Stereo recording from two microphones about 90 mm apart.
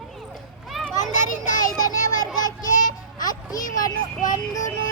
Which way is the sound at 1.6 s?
45° left (ahead or behind).